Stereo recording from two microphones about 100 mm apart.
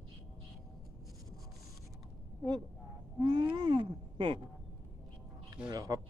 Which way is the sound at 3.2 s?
50° right (ahead or behind).